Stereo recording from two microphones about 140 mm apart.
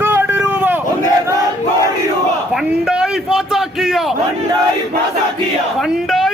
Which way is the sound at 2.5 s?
Centre (ahead or behind).